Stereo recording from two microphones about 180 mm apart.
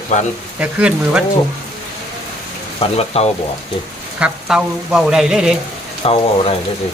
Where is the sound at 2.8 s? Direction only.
35° left (ahead or behind).